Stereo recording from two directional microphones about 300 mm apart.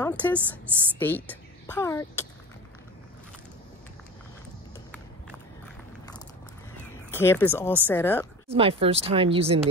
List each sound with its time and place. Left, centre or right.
0.0 s speech: centre
7.1 s speech: centre
8.5 s speech: centre